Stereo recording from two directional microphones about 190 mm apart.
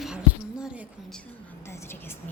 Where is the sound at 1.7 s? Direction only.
10° left (ahead or behind).